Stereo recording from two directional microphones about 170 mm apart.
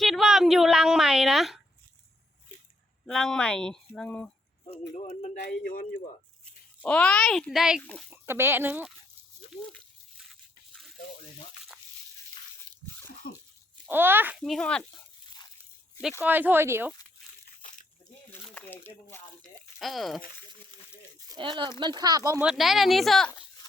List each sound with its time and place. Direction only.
0.0 s a sound: centre (ahead or behind)
3.1 s speech: 5° left (ahead or behind)
4.9 s a man's voice: 45° left (ahead or behind)
6.8 s speech: 5° left (ahead or behind)
8.1 s speech: 15° right (ahead or behind)
13.2 s a sound: 55° left (ahead or behind)
13.8 s speech: 10° right (ahead or behind)
14.4 s speech: 5° left (ahead or behind)
16.2 s speech: 10° right (ahead or behind)
18.5 s speech: 10° left (ahead or behind)
21.2 s speech: 25° right (ahead or behind)
22.4 s speech: centre (ahead or behind)